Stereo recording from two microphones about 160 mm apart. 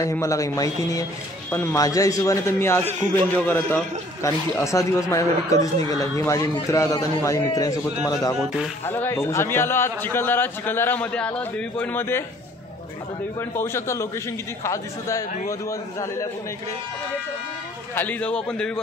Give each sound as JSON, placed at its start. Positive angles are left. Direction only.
{"t": 0.0, "sound": "a man's voice", "side_deg": 20}
{"t": 13.4, "sound": "a man's voice", "side_deg": 15}
{"t": 17.9, "sound": "a man's voice", "side_deg": 10}